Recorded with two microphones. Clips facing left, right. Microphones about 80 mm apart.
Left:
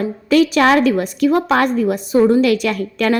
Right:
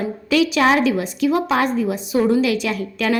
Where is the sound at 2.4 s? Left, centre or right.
Left.